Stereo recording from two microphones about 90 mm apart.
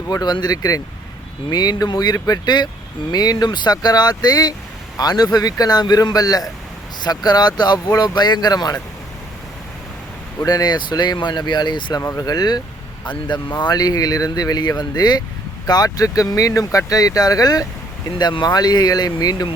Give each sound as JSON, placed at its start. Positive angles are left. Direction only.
{"t": 0.1, "sound": "speech", "side_deg": 50}
{"t": 10.4, "sound": "speech", "side_deg": 50}
{"t": 12.1, "sound": "speech", "side_deg": 45}